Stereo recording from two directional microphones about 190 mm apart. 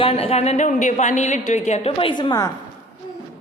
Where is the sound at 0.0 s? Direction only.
30° left (ahead or behind).